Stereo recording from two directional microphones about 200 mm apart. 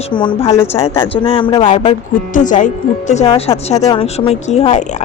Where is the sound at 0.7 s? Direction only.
30° left (ahead or behind).